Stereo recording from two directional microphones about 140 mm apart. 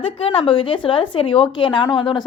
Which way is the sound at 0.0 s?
40° left (ahead or behind).